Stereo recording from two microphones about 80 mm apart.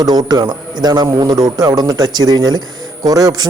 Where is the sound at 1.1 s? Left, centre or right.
Right.